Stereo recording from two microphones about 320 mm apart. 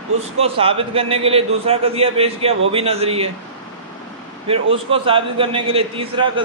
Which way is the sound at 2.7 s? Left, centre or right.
Centre.